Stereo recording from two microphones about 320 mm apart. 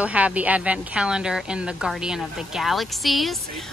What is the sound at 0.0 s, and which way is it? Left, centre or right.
Speech, centre.